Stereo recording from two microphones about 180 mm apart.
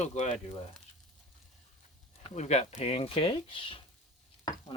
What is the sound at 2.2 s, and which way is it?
Speech, 40° left (ahead or behind).